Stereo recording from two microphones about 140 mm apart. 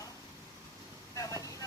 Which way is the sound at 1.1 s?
25° left (ahead or behind).